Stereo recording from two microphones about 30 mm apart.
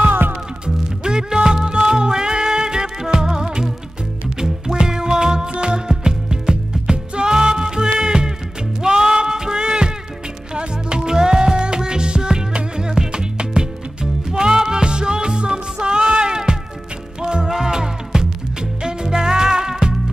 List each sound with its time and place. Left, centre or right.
0.1 s music: right
0.7 s music: right
5.9 s music: right
8.8 s a sound: right
10.5 s music: right